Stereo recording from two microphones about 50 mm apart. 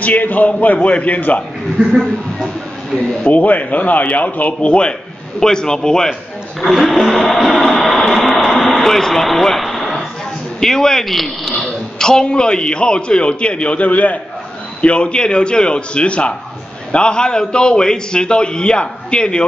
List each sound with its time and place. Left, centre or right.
0.0 s a man's voice: left
2.0 s speech: centre
3.3 s a man's voice: left; by 6.1 s centre
6.6 s speech: centre
8.0 s a sound: centre
10.6 s a man's voice: centre
12.0 s a man's voice: centre